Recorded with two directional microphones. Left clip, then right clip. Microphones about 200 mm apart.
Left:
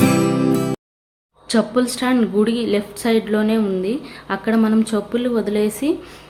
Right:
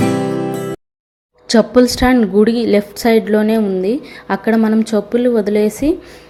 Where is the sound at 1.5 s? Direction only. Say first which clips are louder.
Right 7 dB; 25° right (ahead or behind).